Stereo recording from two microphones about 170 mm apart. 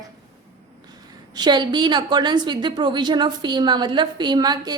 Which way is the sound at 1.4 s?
25° right (ahead or behind).